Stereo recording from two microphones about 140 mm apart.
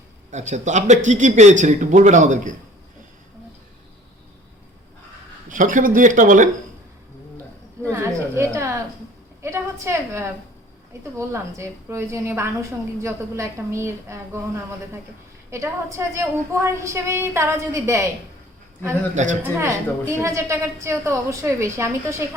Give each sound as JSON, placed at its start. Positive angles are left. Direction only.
{"t": 0.3, "sound": "a man's voice", "side_deg": -55}
{"t": 5.5, "sound": "speech", "side_deg": -70}
{"t": 7.9, "sound": "a sound", "side_deg": -20}
{"t": 9.4, "sound": "a woman's voice", "side_deg": -20}
{"t": 19.1, "sound": "a man's voice", "side_deg": -60}
{"t": 19.5, "sound": "a woman's voice", "side_deg": -20}